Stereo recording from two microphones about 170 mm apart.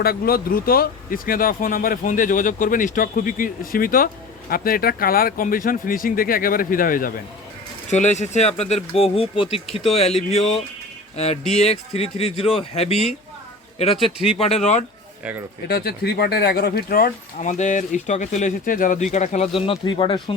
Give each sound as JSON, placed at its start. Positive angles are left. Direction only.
{"t": 0.0, "sound": "speech", "side_deg": 60}
{"t": 7.9, "sound": "speech", "side_deg": 45}
{"t": 15.2, "sound": "speech", "side_deg": -10}
{"t": 15.7, "sound": "speech", "side_deg": 70}